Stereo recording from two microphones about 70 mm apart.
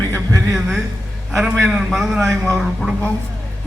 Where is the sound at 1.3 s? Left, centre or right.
Centre.